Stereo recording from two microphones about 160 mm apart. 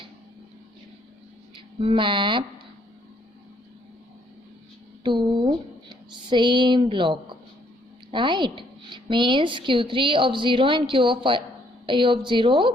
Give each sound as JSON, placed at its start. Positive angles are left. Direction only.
{"t": 1.5, "sound": "speech", "side_deg": -30}
{"t": 5.0, "sound": "a woman's voice", "side_deg": -30}